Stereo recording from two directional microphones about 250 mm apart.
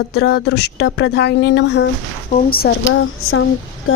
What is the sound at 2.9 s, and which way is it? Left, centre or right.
Speech, left.